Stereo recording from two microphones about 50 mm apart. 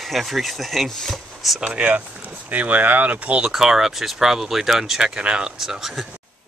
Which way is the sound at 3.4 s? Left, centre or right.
Centre.